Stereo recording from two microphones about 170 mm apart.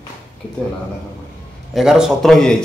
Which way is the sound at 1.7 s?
5° right (ahead or behind).